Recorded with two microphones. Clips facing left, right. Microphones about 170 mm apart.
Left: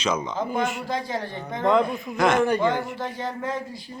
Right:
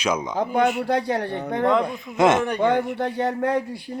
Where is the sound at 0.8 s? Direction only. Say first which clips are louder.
Right 6 dB; 65° right (ahead or behind).